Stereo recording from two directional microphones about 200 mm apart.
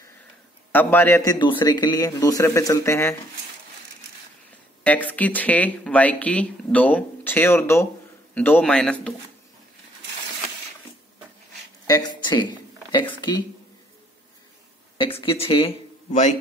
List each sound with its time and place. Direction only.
0.7 s speech: 10° left (ahead or behind)
4.8 s a man's voice: 5° left (ahead or behind)
11.9 s a man's voice: 20° left (ahead or behind)
15.0 s speech: 25° left (ahead or behind)